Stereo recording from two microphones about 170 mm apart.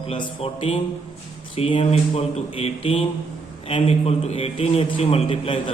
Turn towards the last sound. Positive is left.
turn(degrees=30)  # may be behind; listen again after turning